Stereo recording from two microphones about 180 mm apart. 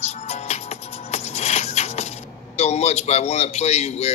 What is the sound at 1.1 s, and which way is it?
Music, 35° left (ahead or behind).